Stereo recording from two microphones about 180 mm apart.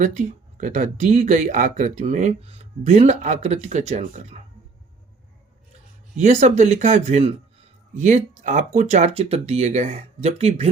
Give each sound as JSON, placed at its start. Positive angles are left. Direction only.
{"t": 0.0, "sound": "speech", "side_deg": -45}
{"t": 6.1, "sound": "speech", "side_deg": -40}